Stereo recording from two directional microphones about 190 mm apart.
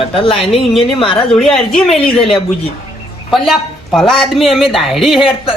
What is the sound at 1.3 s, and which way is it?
Speech, 5° left (ahead or behind).